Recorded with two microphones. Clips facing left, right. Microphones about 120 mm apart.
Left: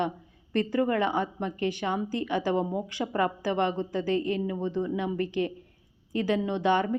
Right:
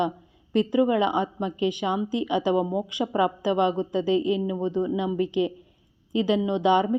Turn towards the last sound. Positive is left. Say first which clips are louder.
# right 4 dB
turn(degrees=-15)  # may be behind; listen again after turning